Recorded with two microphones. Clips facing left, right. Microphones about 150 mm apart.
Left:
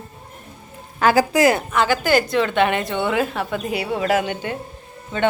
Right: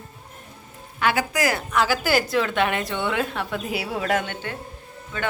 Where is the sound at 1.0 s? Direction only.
35° left (ahead or behind).